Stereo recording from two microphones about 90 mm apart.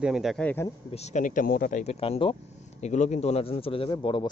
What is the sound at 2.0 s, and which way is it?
Speech, 80° left.